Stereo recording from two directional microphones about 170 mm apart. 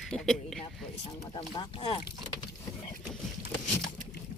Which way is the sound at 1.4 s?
35° left (ahead or behind).